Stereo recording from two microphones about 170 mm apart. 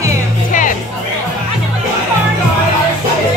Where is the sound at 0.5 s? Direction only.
50° left (ahead or behind).